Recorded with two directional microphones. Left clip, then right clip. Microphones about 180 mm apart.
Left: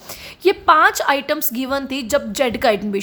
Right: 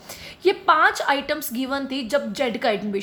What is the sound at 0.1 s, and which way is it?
A woman's voice, 25° left (ahead or behind).